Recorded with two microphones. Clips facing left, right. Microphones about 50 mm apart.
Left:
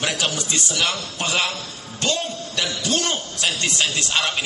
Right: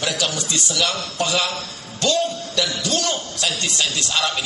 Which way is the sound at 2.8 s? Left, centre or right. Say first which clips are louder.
Even; left.